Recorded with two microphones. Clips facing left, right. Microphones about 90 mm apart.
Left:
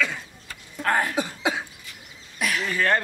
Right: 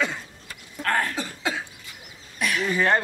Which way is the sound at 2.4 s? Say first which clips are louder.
Right 1 dB; centre (ahead or behind).